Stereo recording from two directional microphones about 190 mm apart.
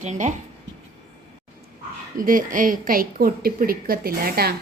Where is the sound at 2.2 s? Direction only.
45° right (ahead or behind).